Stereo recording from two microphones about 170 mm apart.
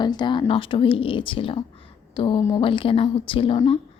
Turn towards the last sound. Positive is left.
turn(degrees=30)  # may be behind; listen again after turning